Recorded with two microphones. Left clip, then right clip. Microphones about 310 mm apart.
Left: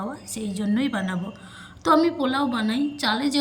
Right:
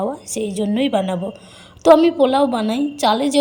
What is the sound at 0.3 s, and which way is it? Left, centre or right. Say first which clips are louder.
Speech: right 10 dB; centre.